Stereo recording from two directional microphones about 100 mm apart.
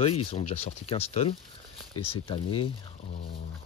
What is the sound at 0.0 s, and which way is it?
Speech, 90° left.